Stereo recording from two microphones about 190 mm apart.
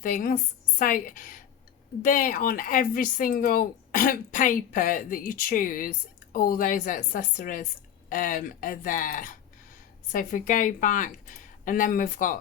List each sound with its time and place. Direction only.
0.0 s a woman's voice: 45° left (ahead or behind)